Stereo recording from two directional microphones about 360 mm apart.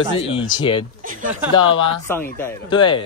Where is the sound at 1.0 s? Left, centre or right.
Right.